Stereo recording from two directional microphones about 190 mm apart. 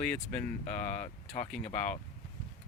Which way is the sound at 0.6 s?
40° left (ahead or behind).